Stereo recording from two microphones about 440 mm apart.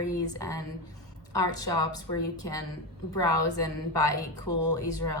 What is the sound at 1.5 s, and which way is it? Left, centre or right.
A woman's voice, centre.